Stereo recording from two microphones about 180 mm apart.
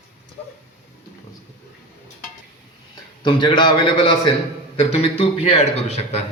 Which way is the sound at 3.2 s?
25° left (ahead or behind).